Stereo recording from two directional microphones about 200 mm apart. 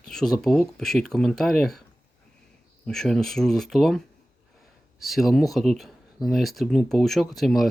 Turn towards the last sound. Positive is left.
turn(degrees=0)  # may be behind; listen again after turning